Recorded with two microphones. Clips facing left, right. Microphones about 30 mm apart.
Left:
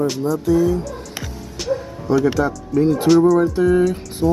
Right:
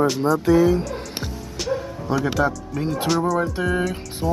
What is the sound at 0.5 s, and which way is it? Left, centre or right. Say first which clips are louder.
Speech: even; right.